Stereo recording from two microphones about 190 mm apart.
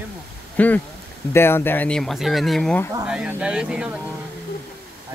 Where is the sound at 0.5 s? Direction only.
10° left (ahead or behind).